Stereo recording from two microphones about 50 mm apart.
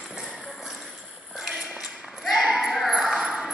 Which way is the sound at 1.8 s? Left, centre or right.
Centre.